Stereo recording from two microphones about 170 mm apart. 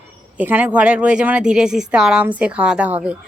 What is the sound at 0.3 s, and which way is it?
Speech, 10° right (ahead or behind).